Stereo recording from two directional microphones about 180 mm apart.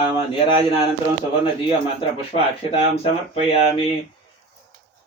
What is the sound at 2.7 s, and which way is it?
Speech, 35° left (ahead or behind).